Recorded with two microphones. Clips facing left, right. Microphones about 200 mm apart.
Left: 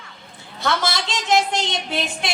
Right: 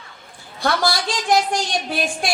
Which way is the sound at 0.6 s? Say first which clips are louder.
Right 2 dB; 20° left (ahead or behind).